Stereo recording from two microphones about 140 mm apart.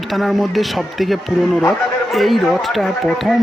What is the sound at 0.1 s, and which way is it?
A man's voice, centre (ahead or behind).